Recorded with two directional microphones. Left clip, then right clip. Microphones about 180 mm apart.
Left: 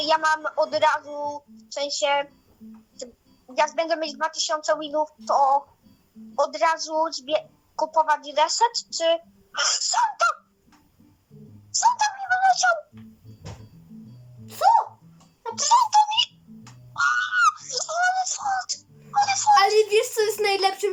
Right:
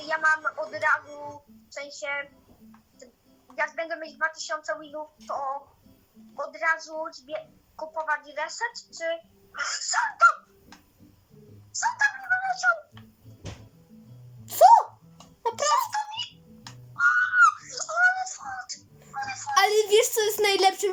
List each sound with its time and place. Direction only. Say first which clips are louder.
0.0 s a woman's voice: left 3 dB; 15° left (ahead or behind)
3.5 s a woman's voice: left 7 dB; 15° left (ahead or behind)
11.7 s a sound: left 4 dB; 15° left (ahead or behind)
15.6 s a child's voice: left 8 dB; 15° left (ahead or behind)
16.9 s a sound: even; 15° left (ahead or behind)
19.5 s a child's voice: right 1 dB; 35° right (ahead or behind)